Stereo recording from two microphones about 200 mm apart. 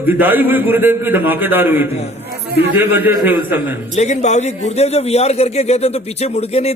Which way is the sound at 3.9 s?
35° left (ahead or behind).